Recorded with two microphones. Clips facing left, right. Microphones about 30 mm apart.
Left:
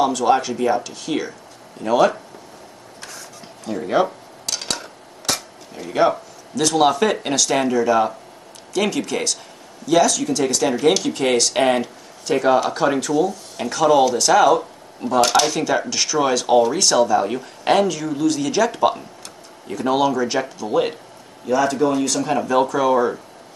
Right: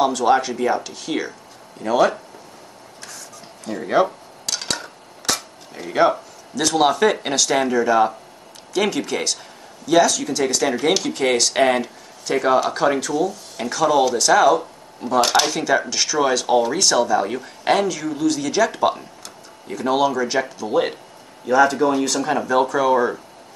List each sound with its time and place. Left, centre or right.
0.0 s speech: centre
3.6 s dishes: centre
8.7 s speech: centre
15.1 s speech: centre